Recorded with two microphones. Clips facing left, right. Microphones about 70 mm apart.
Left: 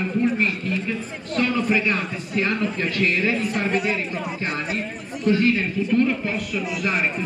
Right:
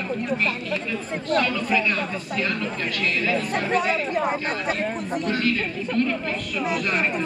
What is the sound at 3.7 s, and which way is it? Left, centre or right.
A man's voice, right.